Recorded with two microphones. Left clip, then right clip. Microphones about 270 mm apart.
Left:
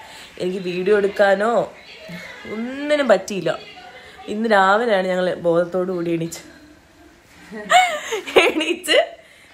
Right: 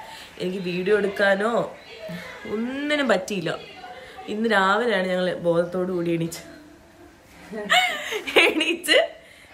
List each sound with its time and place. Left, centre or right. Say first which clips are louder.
0.1 s speech: left 5 dB; centre
7.6 s speech: left 5 dB; centre